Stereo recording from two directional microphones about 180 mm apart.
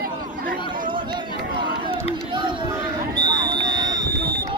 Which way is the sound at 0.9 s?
25° right (ahead or behind).